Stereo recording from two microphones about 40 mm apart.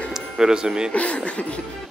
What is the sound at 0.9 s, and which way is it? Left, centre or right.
Music, left.